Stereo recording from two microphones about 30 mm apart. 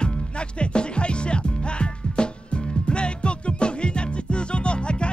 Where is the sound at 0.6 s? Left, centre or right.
Left.